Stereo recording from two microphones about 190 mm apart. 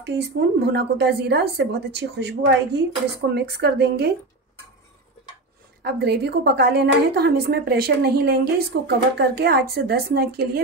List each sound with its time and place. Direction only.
0.0 s a woman's voice: 65° right (ahead or behind)
5.8 s a woman's voice: 60° right (ahead or behind)